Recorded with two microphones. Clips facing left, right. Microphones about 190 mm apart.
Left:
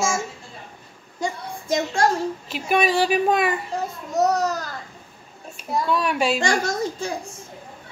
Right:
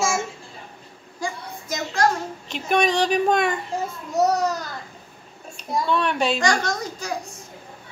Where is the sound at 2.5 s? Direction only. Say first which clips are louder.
Even; 5° left (ahead or behind).